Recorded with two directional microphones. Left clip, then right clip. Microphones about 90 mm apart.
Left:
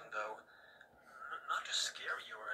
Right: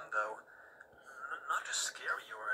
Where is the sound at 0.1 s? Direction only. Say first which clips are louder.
Right 6 dB; centre (ahead or behind).